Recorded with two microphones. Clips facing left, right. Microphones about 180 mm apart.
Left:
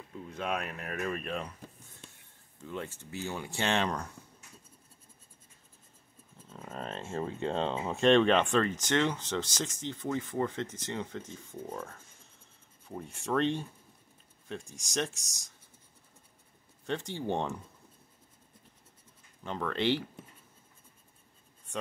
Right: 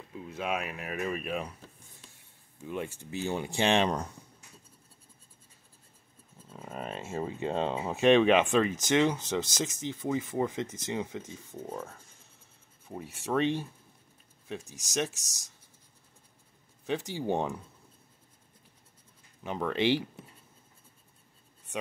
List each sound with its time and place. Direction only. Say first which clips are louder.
0.1 s speech: right 1 dB; 5° right (ahead or behind)
2.6 s speech: right 3 dB; 15° right (ahead or behind)
6.5 s speech: right 1 dB; 10° right (ahead or behind)
16.8 s speech: right 2 dB; 5° right (ahead or behind)
19.4 s speech: right 2 dB; 10° right (ahead or behind)